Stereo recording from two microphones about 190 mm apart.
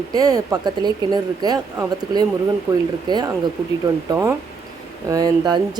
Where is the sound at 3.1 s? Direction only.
20° right (ahead or behind).